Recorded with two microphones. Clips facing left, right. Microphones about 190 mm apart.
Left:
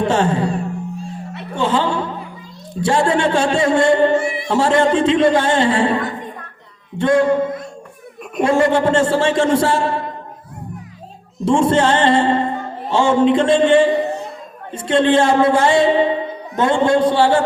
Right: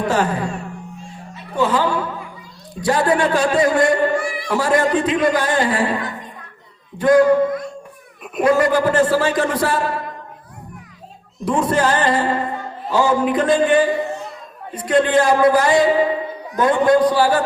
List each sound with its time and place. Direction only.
0.0 s music: 25° left (ahead or behind)
2.8 s speech: 25° left (ahead or behind)
7.0 s speech: 25° left (ahead or behind)
11.4 s speech: 25° left (ahead or behind)